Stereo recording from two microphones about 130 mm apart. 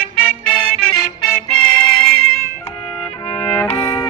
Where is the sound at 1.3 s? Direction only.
5° left (ahead or behind).